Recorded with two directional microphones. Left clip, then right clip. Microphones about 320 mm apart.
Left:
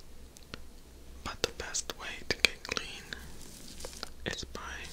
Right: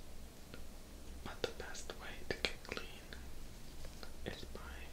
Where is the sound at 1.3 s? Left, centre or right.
Left.